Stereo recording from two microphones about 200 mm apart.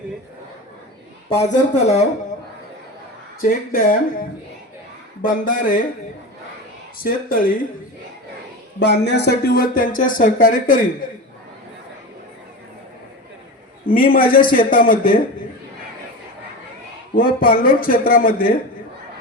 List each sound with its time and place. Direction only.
1.7 s speech: 35° left (ahead or behind)
3.4 s speech: 45° left (ahead or behind)
7.0 s speech: 45° left (ahead or behind)
8.8 s speech: 60° left (ahead or behind); by 10.8 s 45° left (ahead or behind)
13.8 s speech: 45° left (ahead or behind)
17.2 s speech: 45° left (ahead or behind)